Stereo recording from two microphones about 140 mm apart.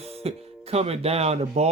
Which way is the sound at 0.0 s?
45° right (ahead or behind).